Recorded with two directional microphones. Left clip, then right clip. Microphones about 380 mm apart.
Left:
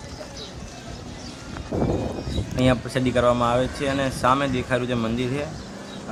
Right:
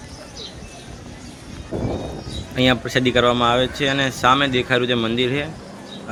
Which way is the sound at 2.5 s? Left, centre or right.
Centre.